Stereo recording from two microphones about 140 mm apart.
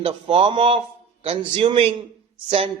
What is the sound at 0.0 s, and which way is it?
A man's voice, 40° right (ahead or behind).